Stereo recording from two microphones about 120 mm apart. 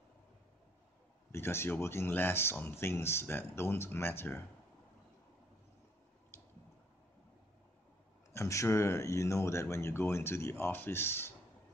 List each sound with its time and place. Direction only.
1.3 s speech: 20° left (ahead or behind)
8.3 s speech: 25° left (ahead or behind)